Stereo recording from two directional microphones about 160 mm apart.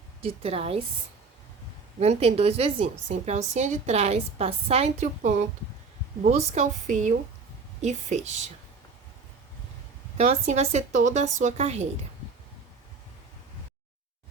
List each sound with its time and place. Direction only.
0.2 s a woman's voice: 40° right (ahead or behind)
2.0 s a woman's voice: 40° right (ahead or behind)
10.2 s speech: 45° right (ahead or behind)